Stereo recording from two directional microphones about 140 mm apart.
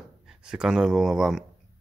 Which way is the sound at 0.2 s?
5° right (ahead or behind).